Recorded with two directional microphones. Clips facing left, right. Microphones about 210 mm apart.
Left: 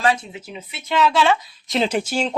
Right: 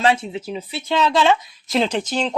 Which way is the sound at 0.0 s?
25° right (ahead or behind).